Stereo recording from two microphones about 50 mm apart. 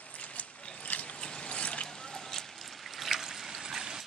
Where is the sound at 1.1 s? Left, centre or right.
Left.